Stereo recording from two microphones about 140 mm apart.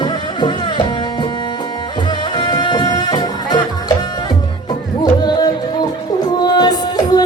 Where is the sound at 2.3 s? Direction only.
30° left (ahead or behind).